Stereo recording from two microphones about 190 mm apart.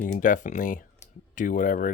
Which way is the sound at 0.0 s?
45° left (ahead or behind).